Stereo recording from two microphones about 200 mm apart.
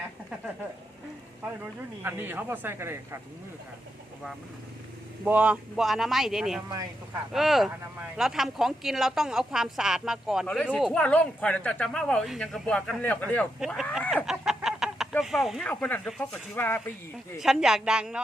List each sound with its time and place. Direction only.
2.0 s speech: 10° right (ahead or behind)
5.2 s speech: 5° right (ahead or behind)
6.7 s speech: 20° right (ahead or behind)
7.3 s speech: centre (ahead or behind)
14.3 s a sound: 5° right (ahead or behind)
15.1 s speech: centre (ahead or behind)
17.4 s speech: centre (ahead or behind)